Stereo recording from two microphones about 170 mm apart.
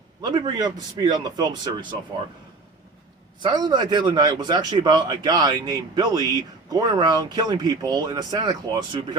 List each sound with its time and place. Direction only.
0.2 s a man's voice: 25° right (ahead or behind)
3.4 s a man's voice: 25° right (ahead or behind)